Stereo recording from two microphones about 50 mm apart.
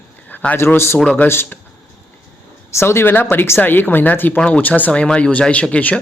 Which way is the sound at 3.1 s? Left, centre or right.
Left.